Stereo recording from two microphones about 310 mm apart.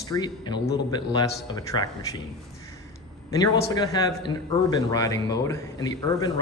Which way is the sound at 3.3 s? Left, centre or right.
Centre.